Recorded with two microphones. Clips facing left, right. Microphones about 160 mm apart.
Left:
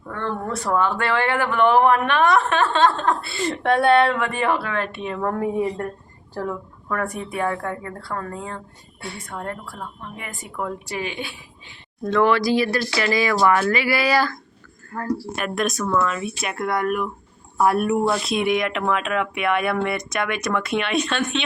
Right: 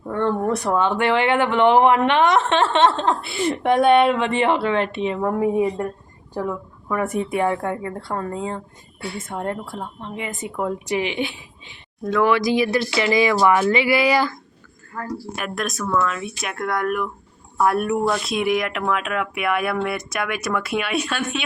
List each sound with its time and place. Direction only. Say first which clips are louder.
0.0 s speech: right 6 dB; 30° right (ahead or behind)
0.4 s speech: right 2 dB; 15° right (ahead or behind)
12.0 s speech: even; 10° right (ahead or behind)
14.9 s speech: left 1 dB; 45° left (ahead or behind)
15.4 s speech: even; centre (ahead or behind)